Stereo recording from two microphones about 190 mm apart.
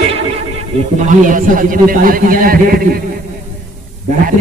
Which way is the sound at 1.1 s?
45° right (ahead or behind).